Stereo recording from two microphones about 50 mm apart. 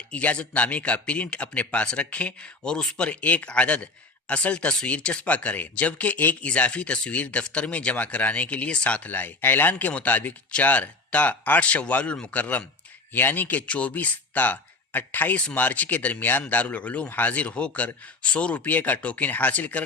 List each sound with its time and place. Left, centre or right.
0.1 s speech: left
3.1 s speech: left
9.0 s speech: left